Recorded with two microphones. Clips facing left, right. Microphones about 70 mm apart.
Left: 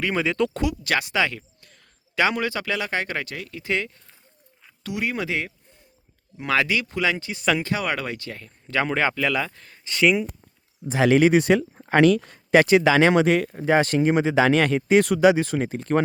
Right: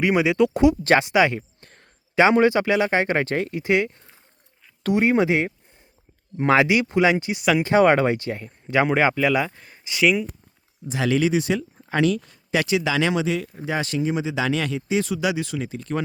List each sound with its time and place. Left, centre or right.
0.0 s speech: centre
0.5 s speech: right
1.6 s a sound: right
2.1 s speech: right
3.2 s speech: right
3.5 s speech: right
6.3 s speech: right
6.6 s speech: right
7.6 s speech: right
8.8 s speech: centre
10.8 s speech: left
11.3 s speech: left
12.5 s speech: left
15.2 s speech: left